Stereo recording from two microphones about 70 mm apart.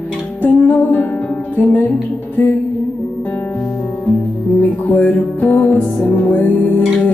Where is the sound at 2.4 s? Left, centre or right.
Left.